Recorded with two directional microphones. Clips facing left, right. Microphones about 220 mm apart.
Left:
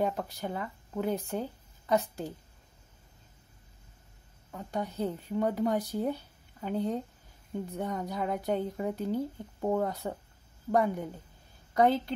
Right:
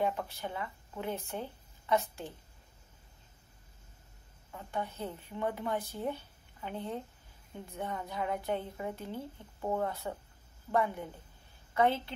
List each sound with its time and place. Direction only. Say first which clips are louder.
0.0 s speech: left 2 dB; 40° left (ahead or behind)
4.5 s a woman's voice: left 3 dB; 40° left (ahead or behind)